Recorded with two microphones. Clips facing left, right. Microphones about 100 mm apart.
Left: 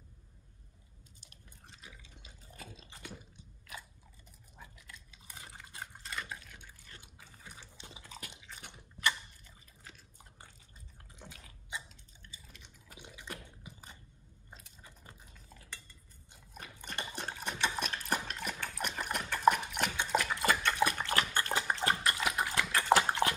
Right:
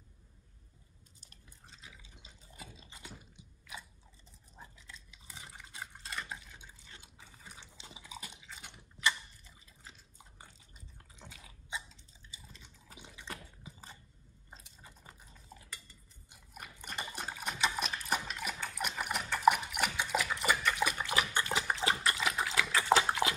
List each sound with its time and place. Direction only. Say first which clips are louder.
4.6 s dog: right 1 dB; 25° right (ahead or behind)
6.1 s drip: even; 20° right (ahead or behind)
7.5 s liquid: left 1 dB; 15° right (ahead or behind)
8.5 s biting: even; centre (ahead or behind)
11.4 s a sound: right 2 dB; 15° right (ahead or behind)
15.5 s cutlery: right 4 dB; 20° right (ahead or behind)
16.3 s dog: even; 10° right (ahead or behind)
18.0 s a sound: even; 10° right (ahead or behind)
19.3 s dog: even; 5° right (ahead or behind)
21.6 s pig: even; 5° right (ahead or behind)
22.2 s dog: even; 5° left (ahead or behind)